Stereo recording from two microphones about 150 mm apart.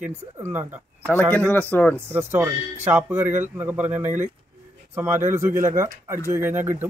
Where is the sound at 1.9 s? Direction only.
15° right (ahead or behind).